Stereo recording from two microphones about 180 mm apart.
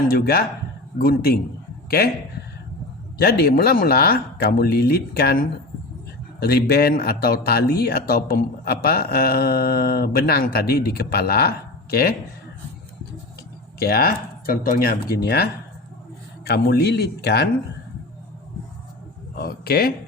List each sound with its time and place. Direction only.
0.1 s a man's voice: 55° left (ahead or behind)
3.2 s a man's voice: 60° left (ahead or behind)
13.7 s a man's voice: 60° left (ahead or behind)
19.4 s a man's voice: 55° left (ahead or behind)